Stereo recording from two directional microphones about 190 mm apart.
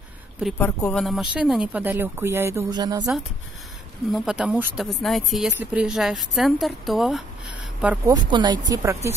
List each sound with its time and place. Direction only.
0.6 s speech: 10° left (ahead or behind); by 3.1 s 20° right (ahead or behind)
4.1 s a woman's voice: centre (ahead or behind)
4.8 s a woman's voice: centre (ahead or behind)
8.1 s speech: 25° right (ahead or behind)